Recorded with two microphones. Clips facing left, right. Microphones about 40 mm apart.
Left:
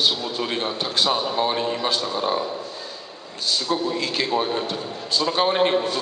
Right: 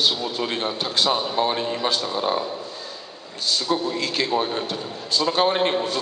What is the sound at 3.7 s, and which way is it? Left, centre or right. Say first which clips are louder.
Speech: right 1 dB; centre.